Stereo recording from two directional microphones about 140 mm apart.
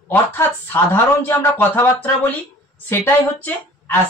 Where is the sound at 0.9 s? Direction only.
15° left (ahead or behind).